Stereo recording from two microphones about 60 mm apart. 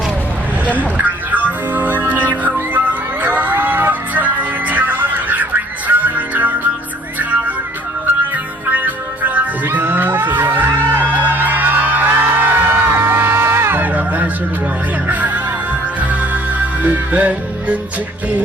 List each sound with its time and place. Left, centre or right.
0.9 s music: right
8.7 s music: right
13.8 s music: right